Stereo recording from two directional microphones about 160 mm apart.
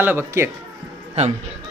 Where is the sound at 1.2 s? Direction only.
40° right (ahead or behind).